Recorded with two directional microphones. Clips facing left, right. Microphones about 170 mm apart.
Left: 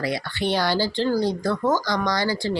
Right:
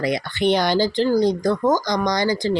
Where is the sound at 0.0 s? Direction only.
20° right (ahead or behind).